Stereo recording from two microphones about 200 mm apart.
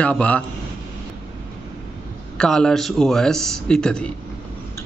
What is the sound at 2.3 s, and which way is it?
Speech, 5° left (ahead or behind).